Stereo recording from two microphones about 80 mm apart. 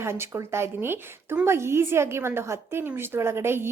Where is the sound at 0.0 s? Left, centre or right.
Right.